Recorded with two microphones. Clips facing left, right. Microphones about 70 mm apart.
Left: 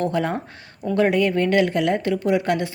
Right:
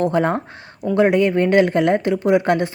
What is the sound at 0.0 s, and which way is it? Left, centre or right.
Speech, right.